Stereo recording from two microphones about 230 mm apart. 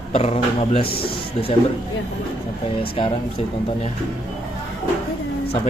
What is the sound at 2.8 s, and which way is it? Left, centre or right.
Speech, left.